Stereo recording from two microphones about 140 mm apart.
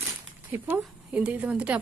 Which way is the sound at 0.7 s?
10° right (ahead or behind).